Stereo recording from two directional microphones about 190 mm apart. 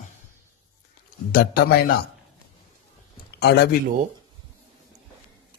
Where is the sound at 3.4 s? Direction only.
55° left (ahead or behind).